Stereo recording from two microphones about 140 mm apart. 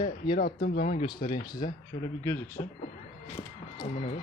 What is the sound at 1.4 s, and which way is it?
Speech, 30° left (ahead or behind).